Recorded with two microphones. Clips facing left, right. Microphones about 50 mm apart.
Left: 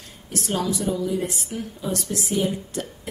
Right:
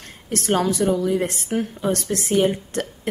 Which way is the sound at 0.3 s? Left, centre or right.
Right.